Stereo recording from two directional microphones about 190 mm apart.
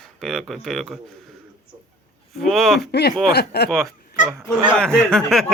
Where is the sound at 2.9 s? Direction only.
60° left (ahead or behind).